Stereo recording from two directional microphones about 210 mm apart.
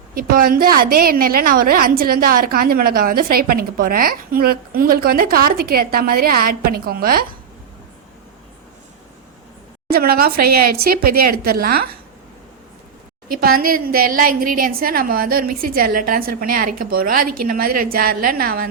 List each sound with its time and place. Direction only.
0.1 s a woman's voice: 40° right (ahead or behind)
9.9 s a woman's voice: 45° right (ahead or behind)
11.4 s a woman's voice: 45° right (ahead or behind)
13.2 s a woman's voice: 45° right (ahead or behind)